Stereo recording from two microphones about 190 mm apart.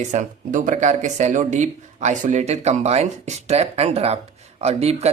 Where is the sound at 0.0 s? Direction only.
40° right (ahead or behind).